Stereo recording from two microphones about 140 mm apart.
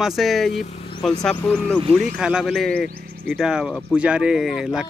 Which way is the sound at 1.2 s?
5° left (ahead or behind).